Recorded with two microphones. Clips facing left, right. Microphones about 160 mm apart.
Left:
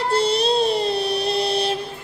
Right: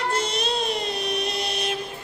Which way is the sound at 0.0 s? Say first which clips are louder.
Left 6 dB; 30° left (ahead or behind).